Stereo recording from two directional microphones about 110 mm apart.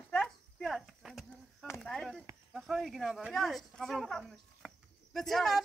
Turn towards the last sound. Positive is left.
turn(degrees=0)  # may be behind; listen again after turning